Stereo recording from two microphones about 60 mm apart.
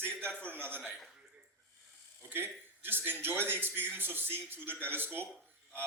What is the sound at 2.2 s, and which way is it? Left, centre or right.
A man's voice, right.